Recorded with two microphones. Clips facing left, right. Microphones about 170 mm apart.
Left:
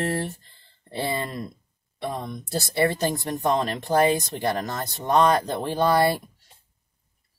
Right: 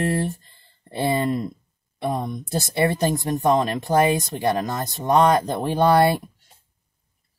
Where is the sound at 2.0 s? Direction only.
50° right (ahead or behind).